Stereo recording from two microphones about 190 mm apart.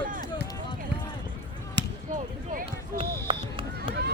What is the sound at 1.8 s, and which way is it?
Basketball bounce, 65° right (ahead or behind).